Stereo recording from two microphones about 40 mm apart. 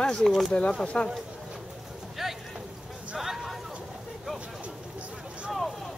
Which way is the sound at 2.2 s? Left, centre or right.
Centre.